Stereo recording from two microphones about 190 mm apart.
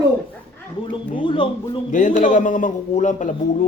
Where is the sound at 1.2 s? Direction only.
25° left (ahead or behind).